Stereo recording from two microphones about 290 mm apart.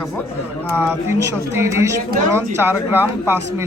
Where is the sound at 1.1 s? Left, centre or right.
Centre.